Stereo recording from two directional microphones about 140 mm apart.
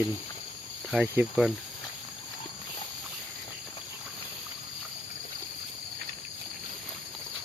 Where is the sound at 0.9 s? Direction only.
10° right (ahead or behind).